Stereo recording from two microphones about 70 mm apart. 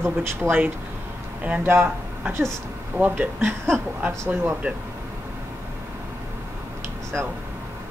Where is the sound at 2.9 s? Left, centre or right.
Right.